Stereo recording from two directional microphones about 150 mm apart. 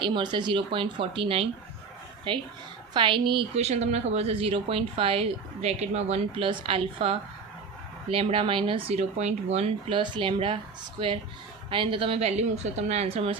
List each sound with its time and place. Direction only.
0.0 s speech: 30° right (ahead or behind); by 9.9 s 45° right (ahead or behind)
9.9 s speech: 35° right (ahead or behind)
11.7 s speech: 35° right (ahead or behind)